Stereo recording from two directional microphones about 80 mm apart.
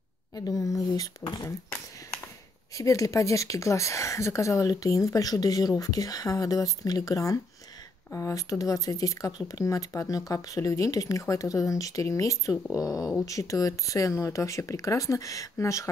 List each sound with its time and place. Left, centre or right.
0.4 s speech: left
1.2 s speech: left
2.7 s speech: left